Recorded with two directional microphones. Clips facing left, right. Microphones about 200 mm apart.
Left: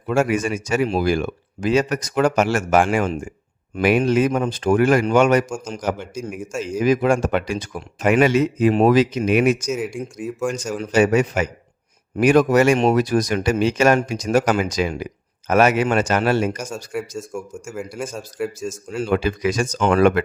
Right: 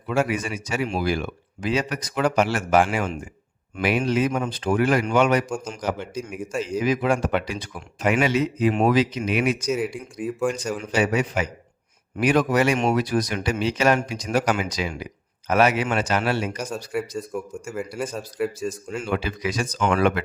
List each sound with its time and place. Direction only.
0.1 s speech: 45° left (ahead or behind)
9.6 s speech: centre (ahead or behind)
10.9 s speech: 45° left (ahead or behind)
16.6 s speech: centre (ahead or behind)
18.9 s speech: 40° left (ahead or behind)